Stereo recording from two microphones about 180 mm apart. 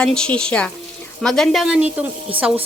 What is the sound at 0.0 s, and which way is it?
A woman's voice, 5° left (ahead or behind).